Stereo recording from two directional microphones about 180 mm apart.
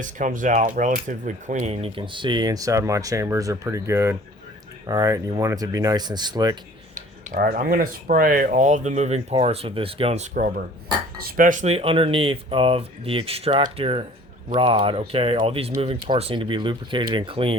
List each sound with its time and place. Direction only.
0.0 s speech: 45° right (ahead or behind); by 6.6 s 25° right (ahead or behind)
7.3 s speech: 50° right (ahead or behind); by 10.2 s 35° right (ahead or behind)
10.3 s speech: 50° right (ahead or behind); by 17.6 s 30° right (ahead or behind)